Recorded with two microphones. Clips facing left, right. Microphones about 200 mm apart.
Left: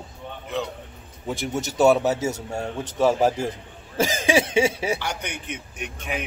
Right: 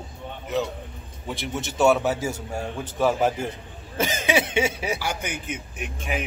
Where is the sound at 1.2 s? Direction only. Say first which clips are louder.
Left 3 dB; 40° left (ahead or behind).